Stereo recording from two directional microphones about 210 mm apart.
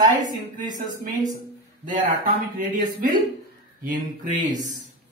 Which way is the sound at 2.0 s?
40° right (ahead or behind).